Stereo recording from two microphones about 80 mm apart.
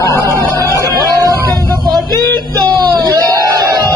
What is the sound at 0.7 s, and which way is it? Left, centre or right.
Music, left.